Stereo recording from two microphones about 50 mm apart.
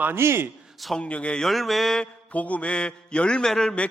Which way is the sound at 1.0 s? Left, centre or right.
Left.